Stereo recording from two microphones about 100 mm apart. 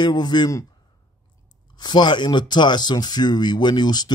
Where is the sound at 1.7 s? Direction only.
45° left (ahead or behind).